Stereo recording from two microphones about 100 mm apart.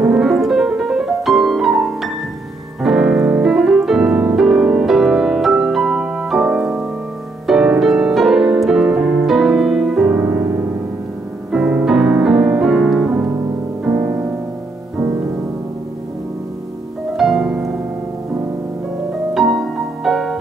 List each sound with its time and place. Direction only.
0.0 s piano: 5° right (ahead or behind)
3.4 s music: 5° right (ahead or behind)
10.1 s music: 20° right (ahead or behind)
11.5 s music: 5° right (ahead or behind)
13.8 s music: 20° right (ahead or behind)
17.2 s music: 5° right (ahead or behind)
19.3 s music: centre (ahead or behind)